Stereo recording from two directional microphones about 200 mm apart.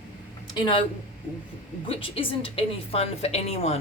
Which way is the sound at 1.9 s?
25° left (ahead or behind).